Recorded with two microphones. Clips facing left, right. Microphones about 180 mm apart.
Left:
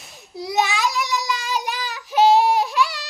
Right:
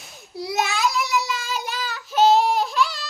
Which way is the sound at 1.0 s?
15° left (ahead or behind).